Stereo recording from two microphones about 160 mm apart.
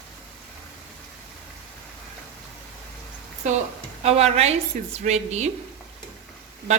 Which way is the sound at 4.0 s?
40° right (ahead or behind).